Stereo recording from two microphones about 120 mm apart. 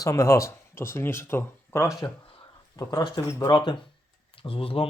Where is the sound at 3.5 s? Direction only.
40° left (ahead or behind).